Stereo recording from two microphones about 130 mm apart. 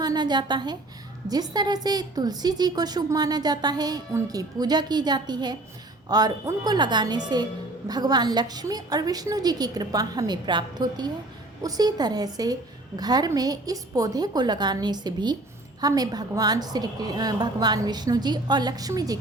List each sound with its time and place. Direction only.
0.0 s a woman's voice: 30° right (ahead or behind)